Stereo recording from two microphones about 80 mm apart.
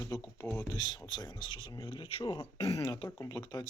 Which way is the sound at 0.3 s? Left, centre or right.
Left.